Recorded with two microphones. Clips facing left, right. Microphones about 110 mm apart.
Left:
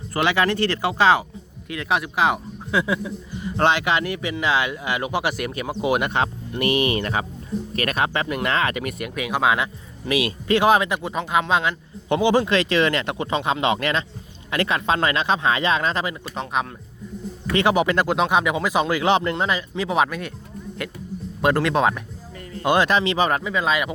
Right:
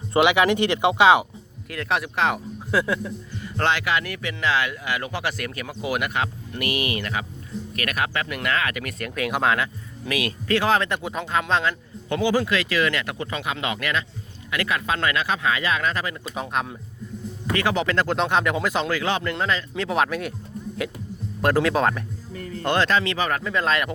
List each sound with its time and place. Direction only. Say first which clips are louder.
0.1 s speech: right 3 dB; 15° right (ahead or behind)
1.7 s speech: left 2 dB; centre (ahead or behind)
3.3 s speech: left 4 dB; 20° left (ahead or behind)
10.1 s speech: left 3 dB; 20° left (ahead or behind)
10.8 s speech: left 2 dB; 5° left (ahead or behind); by 16.1 s 25° left (ahead or behind)
16.3 s speech: left 1 dB; centre (ahead or behind)
17.5 s speech: left 4 dB; 20° left (ahead or behind)
19.7 s speech: left 2 dB; 5° left (ahead or behind)
21.4 s speech: left 1 dB; centre (ahead or behind)
22.6 s speech: left 3 dB; 15° left (ahead or behind)
23.4 s speech: left 1 dB; 5° left (ahead or behind)